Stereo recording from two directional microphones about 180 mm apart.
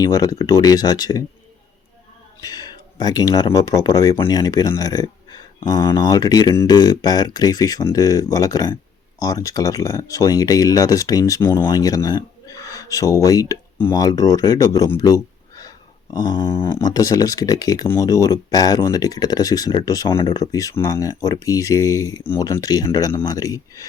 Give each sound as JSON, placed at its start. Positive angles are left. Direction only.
{"t": 0.0, "sound": "speech", "side_deg": 20}
{"t": 2.4, "sound": "a sound", "side_deg": 20}
{"t": 3.0, "sound": "speech", "side_deg": 20}